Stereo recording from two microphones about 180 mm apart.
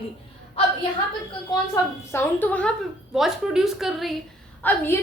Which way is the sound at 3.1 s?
Centre (ahead or behind).